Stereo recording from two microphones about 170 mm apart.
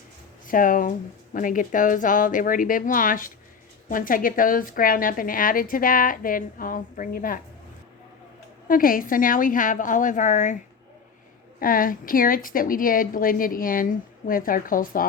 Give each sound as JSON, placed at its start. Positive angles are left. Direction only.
{"t": 0.4, "sound": "a woman's voice", "side_deg": 55}
{"t": 8.6, "sound": "a woman's voice", "side_deg": 55}
{"t": 11.6, "sound": "a woman's voice", "side_deg": 55}